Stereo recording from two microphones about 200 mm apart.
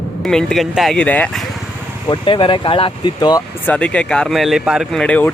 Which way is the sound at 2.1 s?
25° left (ahead or behind).